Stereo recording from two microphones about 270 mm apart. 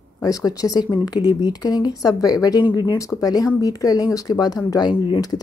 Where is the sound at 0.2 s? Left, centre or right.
Centre.